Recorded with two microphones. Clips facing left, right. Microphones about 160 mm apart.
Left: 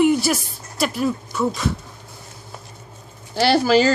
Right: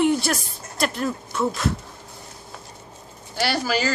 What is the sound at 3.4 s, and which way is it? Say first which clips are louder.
Speech: left 8 dB; 30° left (ahead or behind).